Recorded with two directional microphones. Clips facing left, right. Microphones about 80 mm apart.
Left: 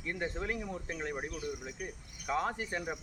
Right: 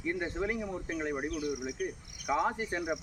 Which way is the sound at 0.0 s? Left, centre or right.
Centre.